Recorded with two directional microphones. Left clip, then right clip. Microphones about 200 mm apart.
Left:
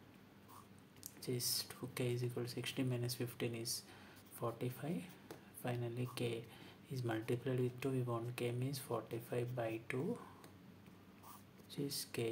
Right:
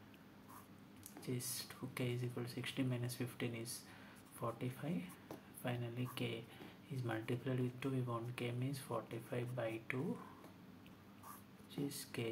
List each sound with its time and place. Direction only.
1.2 s speech: 15° left (ahead or behind)
11.7 s speech: 15° left (ahead or behind)